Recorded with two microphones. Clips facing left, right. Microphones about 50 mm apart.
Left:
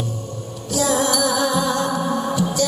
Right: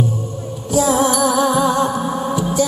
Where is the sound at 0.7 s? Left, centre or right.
Centre.